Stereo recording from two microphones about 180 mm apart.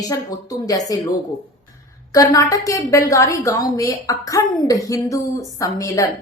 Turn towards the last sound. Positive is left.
turn(degrees=15)  # may be behind; listen again after turning